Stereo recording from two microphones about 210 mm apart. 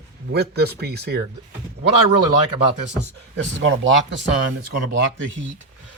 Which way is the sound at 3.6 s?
60° right (ahead or behind).